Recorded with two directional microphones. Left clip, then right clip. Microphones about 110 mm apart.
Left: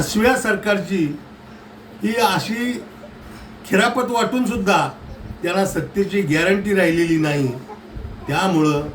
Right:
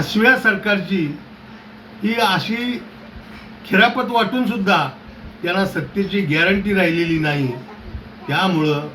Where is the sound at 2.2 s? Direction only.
25° left (ahead or behind).